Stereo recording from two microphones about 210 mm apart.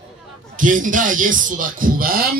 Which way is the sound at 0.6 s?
40° right (ahead or behind).